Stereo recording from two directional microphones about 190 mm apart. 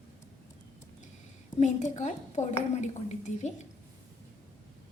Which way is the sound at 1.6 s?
40° left (ahead or behind).